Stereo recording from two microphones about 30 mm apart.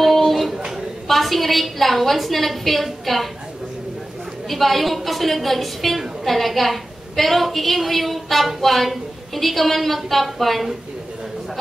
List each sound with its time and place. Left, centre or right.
0.0 s a sound: centre
1.0 s a woman's voice: centre
4.5 s a woman's voice: centre